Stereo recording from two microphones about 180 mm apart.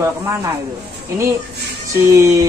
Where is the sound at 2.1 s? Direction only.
15° right (ahead or behind).